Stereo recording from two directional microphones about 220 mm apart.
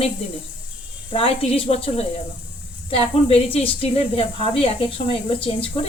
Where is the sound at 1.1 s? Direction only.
25° left (ahead or behind).